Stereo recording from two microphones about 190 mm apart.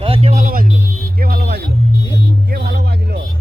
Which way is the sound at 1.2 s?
55° right (ahead or behind).